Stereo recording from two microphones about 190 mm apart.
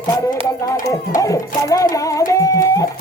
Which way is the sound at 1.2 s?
15° left (ahead or behind).